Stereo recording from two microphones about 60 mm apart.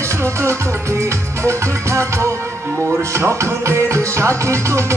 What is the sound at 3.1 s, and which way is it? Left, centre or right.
Music, right.